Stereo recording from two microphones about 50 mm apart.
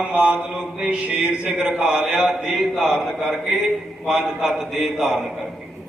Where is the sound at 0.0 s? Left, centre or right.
Right.